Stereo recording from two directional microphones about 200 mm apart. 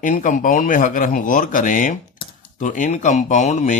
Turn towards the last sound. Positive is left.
turn(degrees=35)  # may be behind; listen again after turning